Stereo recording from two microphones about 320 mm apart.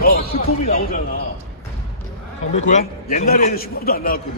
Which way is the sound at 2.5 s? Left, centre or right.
Left.